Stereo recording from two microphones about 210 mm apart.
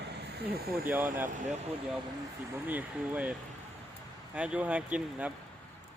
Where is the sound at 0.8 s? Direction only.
10° right (ahead or behind).